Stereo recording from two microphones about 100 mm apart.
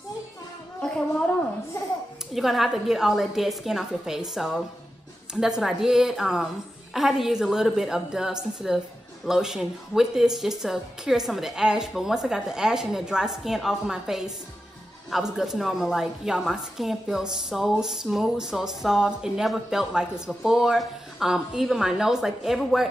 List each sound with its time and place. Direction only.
0.7 s speech: 10° left (ahead or behind)
2.3 s a woman's voice: centre (ahead or behind)